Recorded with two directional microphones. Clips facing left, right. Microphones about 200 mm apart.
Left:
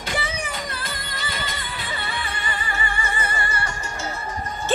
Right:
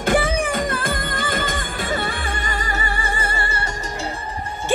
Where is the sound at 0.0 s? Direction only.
50° right (ahead or behind); by 4.1 s 30° right (ahead or behind).